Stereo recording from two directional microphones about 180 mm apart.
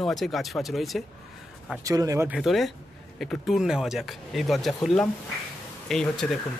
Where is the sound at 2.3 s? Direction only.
Centre (ahead or behind).